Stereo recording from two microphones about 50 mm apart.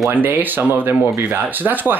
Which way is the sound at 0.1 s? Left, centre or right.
Right.